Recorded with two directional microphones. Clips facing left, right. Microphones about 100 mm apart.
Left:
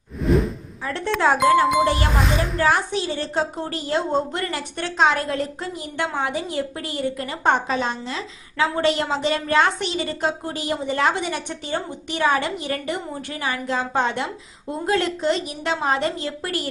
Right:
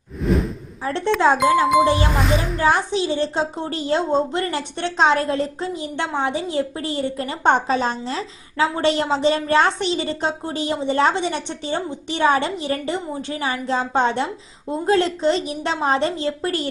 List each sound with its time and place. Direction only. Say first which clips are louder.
0.2 s whoosh: left 1 dB; centre (ahead or behind)
0.9 s speech: right 4 dB; 25° right (ahead or behind)
1.8 s music: right 3 dB; 15° right (ahead or behind)
2.1 s speech: right 1 dB; centre (ahead or behind)
2.6 s a woman's voice: right 4 dB; 25° right (ahead or behind)